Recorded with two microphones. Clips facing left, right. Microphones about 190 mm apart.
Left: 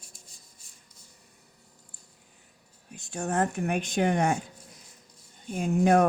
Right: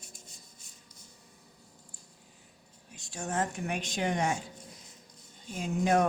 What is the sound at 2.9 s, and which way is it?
Speech, 55° left (ahead or behind).